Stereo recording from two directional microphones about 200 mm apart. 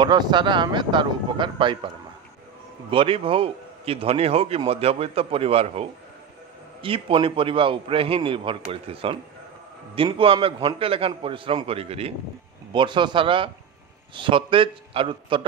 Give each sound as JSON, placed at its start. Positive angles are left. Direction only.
{"t": 0.0, "sound": "a man's voice", "side_deg": -20}
{"t": 2.9, "sound": "a man's voice", "side_deg": -25}